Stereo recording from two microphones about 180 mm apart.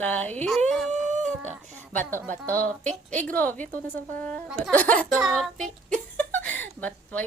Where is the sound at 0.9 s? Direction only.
40° right (ahead or behind).